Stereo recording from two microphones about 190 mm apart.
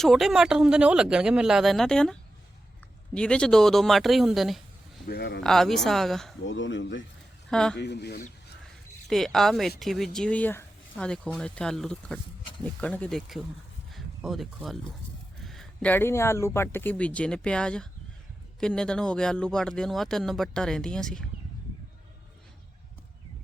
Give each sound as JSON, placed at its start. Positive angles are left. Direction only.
{"t": 0.0, "sound": "speech", "side_deg": 0}
{"t": 3.2, "sound": "speech", "side_deg": 5}
{"t": 5.0, "sound": "speech", "side_deg": 60}
{"t": 5.4, "sound": "speech", "side_deg": 0}
{"t": 6.4, "sound": "speech", "side_deg": 75}
{"t": 7.5, "sound": "speech", "side_deg": 5}
{"t": 7.8, "sound": "speech", "side_deg": 65}
{"t": 9.0, "sound": "speech", "side_deg": 0}